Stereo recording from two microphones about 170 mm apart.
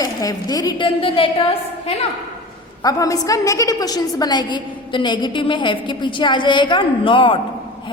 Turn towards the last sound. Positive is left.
turn(degrees=30)  # may be behind; listen again after turning